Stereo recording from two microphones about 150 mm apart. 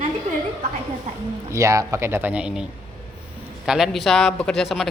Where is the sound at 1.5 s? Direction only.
20° right (ahead or behind).